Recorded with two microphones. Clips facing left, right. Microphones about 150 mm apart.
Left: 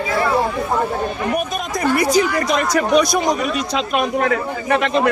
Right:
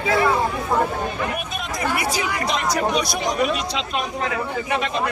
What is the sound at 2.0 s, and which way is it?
Speech, 40° left (ahead or behind).